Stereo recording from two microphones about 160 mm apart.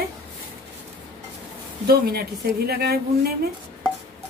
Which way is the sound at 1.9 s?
75° right (ahead or behind).